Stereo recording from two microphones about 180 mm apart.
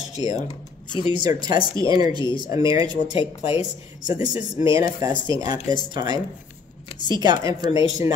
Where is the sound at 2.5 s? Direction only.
20° right (ahead or behind).